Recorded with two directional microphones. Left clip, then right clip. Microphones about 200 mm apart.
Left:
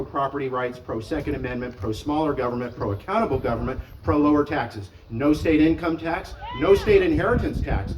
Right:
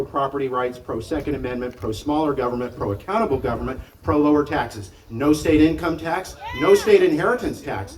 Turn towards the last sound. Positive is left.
turn(degrees=35)  # may be behind; listen again after turning